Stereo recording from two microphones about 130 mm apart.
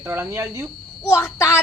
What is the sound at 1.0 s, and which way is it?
Speech, 20° left (ahead or behind).